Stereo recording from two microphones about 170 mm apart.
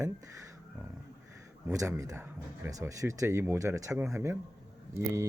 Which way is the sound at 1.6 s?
20° right (ahead or behind).